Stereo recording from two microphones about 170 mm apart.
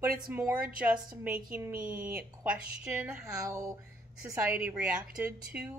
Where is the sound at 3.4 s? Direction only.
20° right (ahead or behind).